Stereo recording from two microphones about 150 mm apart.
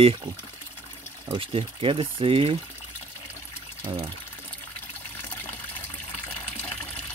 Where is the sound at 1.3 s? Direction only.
35° right (ahead or behind).